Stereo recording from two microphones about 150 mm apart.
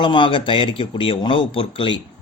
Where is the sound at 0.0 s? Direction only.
35° left (ahead or behind).